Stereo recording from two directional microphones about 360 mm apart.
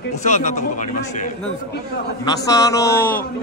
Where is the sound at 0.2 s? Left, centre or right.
Centre.